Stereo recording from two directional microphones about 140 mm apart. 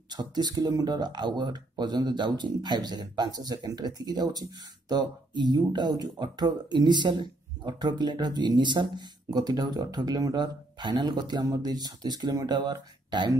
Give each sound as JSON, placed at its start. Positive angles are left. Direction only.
{"t": 0.1, "sound": "speech", "side_deg": -30}